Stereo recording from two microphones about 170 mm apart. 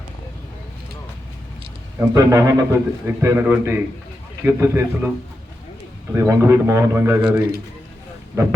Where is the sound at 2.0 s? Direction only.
15° right (ahead or behind).